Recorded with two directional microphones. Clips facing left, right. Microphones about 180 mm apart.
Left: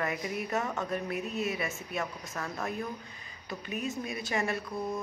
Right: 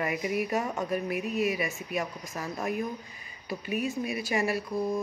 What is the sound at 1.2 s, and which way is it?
Speech, 60° right (ahead or behind).